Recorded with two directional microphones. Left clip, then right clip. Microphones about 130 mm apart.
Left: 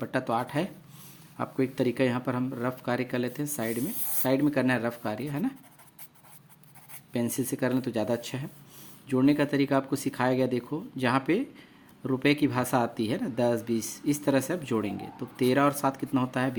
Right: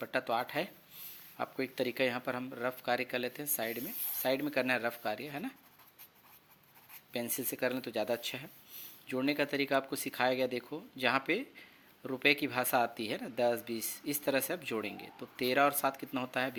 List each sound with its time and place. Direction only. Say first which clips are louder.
0.0 s speech: left 4 dB; 25° right (ahead or behind)
7.1 s speech: left 7 dB; 25° right (ahead or behind)